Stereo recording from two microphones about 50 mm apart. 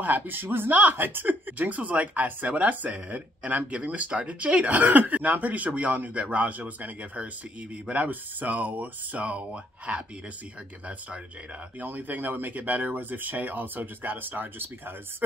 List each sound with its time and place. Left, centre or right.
0.0 s speech: right
0.7 s speech: right
11.8 s speech: right